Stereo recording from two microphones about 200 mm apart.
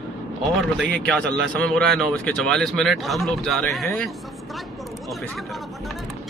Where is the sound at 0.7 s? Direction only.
5° left (ahead or behind).